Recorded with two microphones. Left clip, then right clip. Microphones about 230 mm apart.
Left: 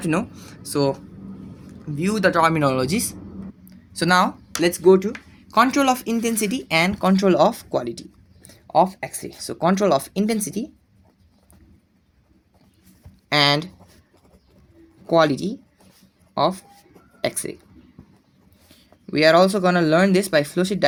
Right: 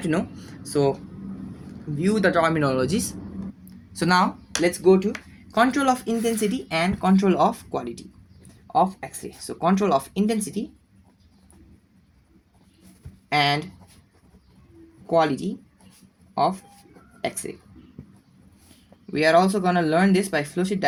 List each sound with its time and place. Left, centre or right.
0.0 s speech: left
2.0 s speech: left
3.7 s a sound: centre
5.5 s speech: left
8.4 s a sound: left
9.0 s speech: left
13.3 s speech: left
15.0 s a man's voice: left
19.1 s speech: left